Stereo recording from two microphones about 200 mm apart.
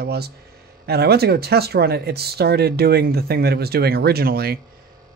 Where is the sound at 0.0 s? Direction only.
55° right (ahead or behind).